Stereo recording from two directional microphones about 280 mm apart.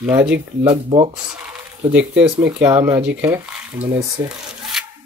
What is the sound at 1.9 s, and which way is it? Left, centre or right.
Speech, centre.